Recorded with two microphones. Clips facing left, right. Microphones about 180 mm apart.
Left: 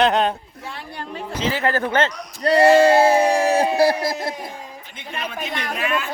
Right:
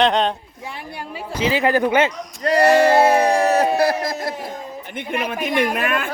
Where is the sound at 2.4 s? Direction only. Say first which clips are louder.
Left 1 dB; 30° left (ahead or behind).